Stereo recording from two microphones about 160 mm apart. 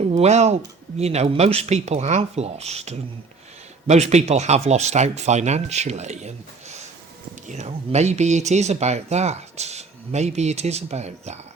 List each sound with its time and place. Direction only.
0.0 s speech: 45° right (ahead or behind)